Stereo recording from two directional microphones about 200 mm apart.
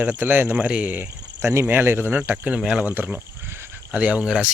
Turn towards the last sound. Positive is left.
turn(degrees=-5)  # may be behind; listen again after turning